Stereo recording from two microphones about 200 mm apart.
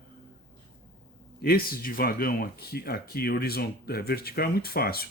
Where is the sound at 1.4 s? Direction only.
50° left (ahead or behind).